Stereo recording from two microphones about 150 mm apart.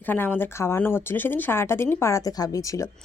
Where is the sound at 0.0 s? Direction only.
15° left (ahead or behind).